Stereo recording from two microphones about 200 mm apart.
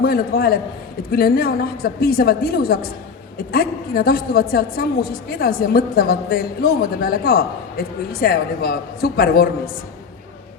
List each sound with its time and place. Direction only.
0.0 s a woman's voice: 50° left (ahead or behind)